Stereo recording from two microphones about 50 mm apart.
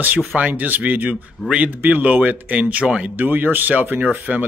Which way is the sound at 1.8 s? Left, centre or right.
Right.